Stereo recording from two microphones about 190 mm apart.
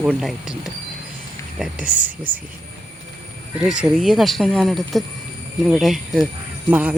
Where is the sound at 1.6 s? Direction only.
5° right (ahead or behind).